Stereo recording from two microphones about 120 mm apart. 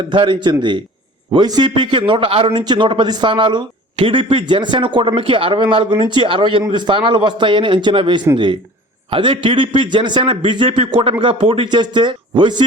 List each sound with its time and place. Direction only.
0.1 s a man's voice: 40° right (ahead or behind)